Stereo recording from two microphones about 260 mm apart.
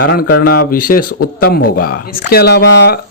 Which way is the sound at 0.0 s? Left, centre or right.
Left.